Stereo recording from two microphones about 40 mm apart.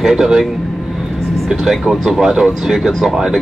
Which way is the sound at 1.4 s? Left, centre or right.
Centre.